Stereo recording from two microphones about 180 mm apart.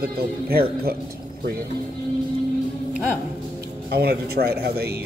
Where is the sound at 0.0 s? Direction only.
55° right (ahead or behind).